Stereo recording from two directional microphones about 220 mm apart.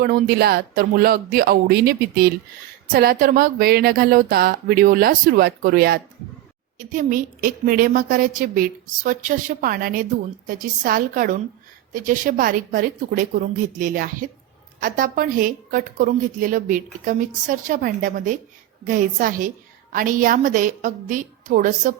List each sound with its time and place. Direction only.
0.0 s a woman's voice: 45° right (ahead or behind)